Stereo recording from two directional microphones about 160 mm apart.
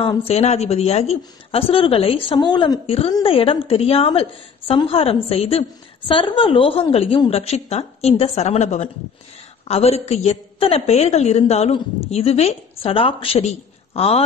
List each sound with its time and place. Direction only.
0.2 s a woman's voice: 40° left (ahead or behind)